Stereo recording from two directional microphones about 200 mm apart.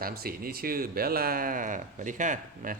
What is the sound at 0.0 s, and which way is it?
Speech, 50° right (ahead or behind).